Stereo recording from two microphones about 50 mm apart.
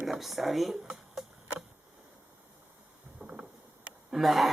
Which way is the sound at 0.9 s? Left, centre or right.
Centre.